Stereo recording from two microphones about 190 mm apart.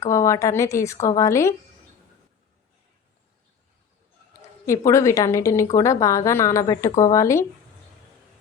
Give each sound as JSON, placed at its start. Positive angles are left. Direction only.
{"t": 0.0, "sound": "a woman's voice", "side_deg": 15}
{"t": 4.9, "sound": "a woman's voice", "side_deg": 15}